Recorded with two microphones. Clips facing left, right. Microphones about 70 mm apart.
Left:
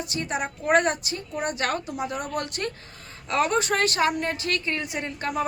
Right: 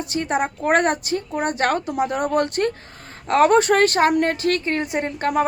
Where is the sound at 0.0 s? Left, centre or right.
Right.